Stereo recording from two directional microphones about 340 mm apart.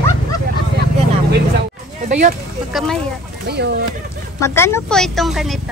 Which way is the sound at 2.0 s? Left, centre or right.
Right.